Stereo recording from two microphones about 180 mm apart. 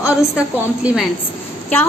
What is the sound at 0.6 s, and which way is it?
Speech, 5° right (ahead or behind).